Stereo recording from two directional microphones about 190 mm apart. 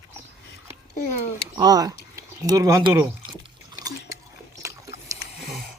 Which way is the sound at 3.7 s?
20° right (ahead or behind).